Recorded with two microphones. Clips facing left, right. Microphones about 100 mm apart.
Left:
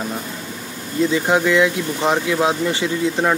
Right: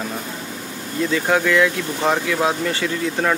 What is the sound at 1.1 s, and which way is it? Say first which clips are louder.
Speech: even; 20° left (ahead or behind).